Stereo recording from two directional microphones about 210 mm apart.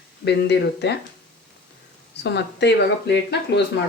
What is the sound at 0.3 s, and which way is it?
Speech, 55° left (ahead or behind).